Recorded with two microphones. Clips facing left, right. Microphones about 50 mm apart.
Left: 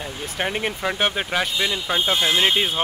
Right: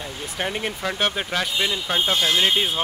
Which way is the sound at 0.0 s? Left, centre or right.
Centre.